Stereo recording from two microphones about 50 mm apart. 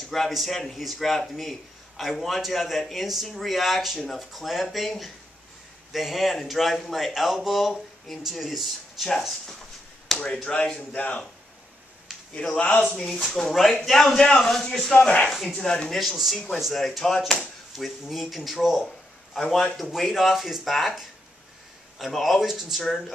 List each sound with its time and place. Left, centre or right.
0.0 s a man's voice: centre
10.2 s speech: left
12.4 s speech: left
12.8 s a man's voice: centre
16.0 s a man's voice: centre